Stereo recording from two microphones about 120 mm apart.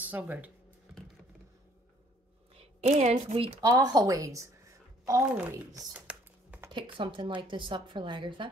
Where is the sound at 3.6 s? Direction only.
30° right (ahead or behind).